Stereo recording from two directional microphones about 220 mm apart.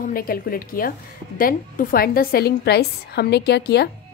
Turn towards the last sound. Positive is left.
turn(degrees=50)  # may be behind; listen again after turning